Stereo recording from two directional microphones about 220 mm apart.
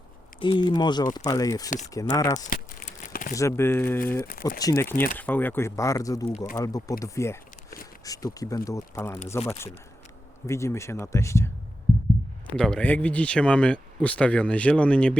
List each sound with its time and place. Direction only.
0.3 s speech: 20° left (ahead or behind)
2.5 s crumpling: 40° left (ahead or behind)
3.3 s speech: 10° left (ahead or behind)
4.2 s speech: 40° left (ahead or behind)
4.6 s speech: 15° left (ahead or behind)
10.4 s speech: 15° left (ahead or behind)
12.5 s speech: 5° left (ahead or behind)